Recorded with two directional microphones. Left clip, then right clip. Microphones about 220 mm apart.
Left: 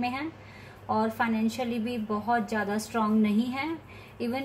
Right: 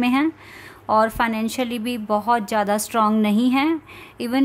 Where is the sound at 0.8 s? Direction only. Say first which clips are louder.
Right 9 dB; 50° right (ahead or behind).